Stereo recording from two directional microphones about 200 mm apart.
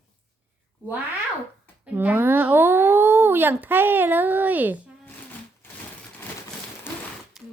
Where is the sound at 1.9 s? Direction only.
10° right (ahead or behind).